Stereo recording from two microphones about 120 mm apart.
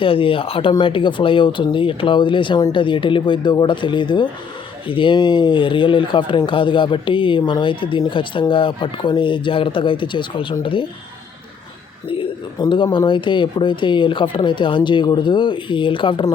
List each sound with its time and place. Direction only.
0.0 s speech: 50° left (ahead or behind)
12.0 s speech: 45° left (ahead or behind)